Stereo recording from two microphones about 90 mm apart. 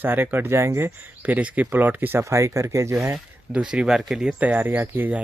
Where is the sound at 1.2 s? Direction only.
15° right (ahead or behind).